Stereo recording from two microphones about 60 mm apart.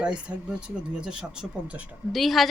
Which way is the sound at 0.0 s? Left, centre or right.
Centre.